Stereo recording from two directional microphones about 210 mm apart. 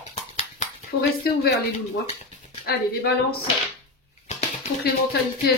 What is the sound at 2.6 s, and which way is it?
Speech, 50° left (ahead or behind).